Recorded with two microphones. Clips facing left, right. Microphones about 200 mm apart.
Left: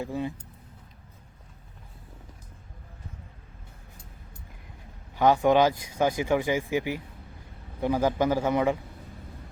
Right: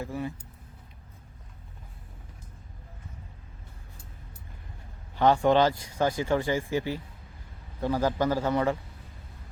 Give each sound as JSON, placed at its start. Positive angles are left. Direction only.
{"t": 0.0, "sound": "speech", "side_deg": 20}
{"t": 5.1, "sound": "speech", "side_deg": 10}